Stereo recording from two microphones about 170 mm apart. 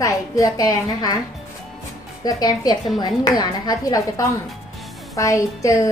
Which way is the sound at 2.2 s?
20° left (ahead or behind).